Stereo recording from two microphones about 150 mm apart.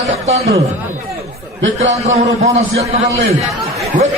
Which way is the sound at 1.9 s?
50° right (ahead or behind).